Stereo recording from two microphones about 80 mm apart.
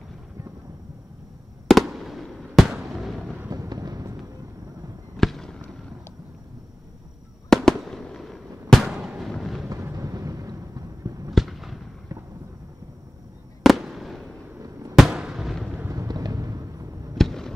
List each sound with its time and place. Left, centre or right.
1.7 s fireworks: centre
3.4 s a sound: right
5.1 s fireworks: centre
7.4 s fireworks: centre
8.8 s a sound: centre
9.3 s thunder: centre
9.9 s a sound: right
11.3 s fireworks: centre
13.6 s fireworks: centre
14.6 s fireworks: right
15.0 s fireworks: centre
15.9 s fireworks: right
17.2 s fireworks: centre